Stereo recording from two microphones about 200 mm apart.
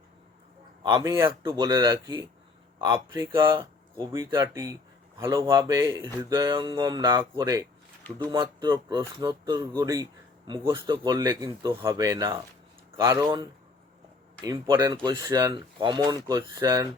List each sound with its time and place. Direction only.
0.8 s speech: 25° right (ahead or behind)